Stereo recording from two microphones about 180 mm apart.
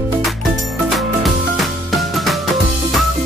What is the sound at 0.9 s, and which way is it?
Music, centre (ahead or behind).